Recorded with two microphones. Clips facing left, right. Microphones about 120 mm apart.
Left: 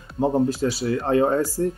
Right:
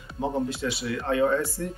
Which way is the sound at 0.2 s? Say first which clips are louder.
Left 7 dB; 40° left (ahead or behind).